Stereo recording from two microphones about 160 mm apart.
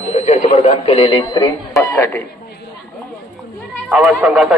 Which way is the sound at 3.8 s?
5° right (ahead or behind).